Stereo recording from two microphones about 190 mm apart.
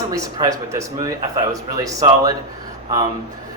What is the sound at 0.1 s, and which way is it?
A man's voice, 20° right (ahead or behind).